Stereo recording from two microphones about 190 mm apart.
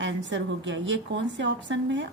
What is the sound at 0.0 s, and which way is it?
Speech, 70° right (ahead or behind).